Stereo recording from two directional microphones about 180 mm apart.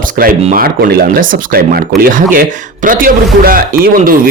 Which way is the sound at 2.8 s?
50° right (ahead or behind).